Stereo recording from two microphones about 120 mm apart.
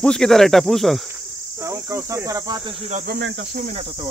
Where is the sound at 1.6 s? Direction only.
25° right (ahead or behind).